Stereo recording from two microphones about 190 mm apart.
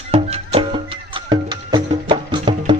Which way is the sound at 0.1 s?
30° right (ahead or behind).